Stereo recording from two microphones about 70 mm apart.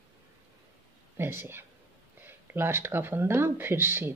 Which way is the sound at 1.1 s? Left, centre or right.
Right.